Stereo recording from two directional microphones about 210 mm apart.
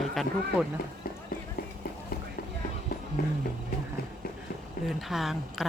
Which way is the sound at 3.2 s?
45° left (ahead or behind).